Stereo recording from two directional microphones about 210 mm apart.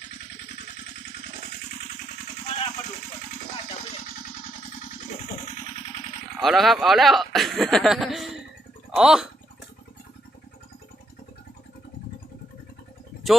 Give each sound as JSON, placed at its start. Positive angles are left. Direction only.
{"t": 2.5, "sound": "vehicle", "side_deg": 30}
{"t": 6.4, "sound": "speech", "side_deg": 0}